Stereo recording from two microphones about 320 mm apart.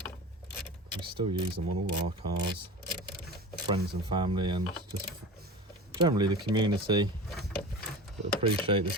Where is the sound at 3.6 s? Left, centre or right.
Centre.